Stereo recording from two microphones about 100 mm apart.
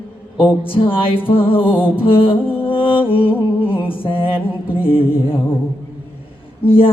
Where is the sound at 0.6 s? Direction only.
65° left (ahead or behind).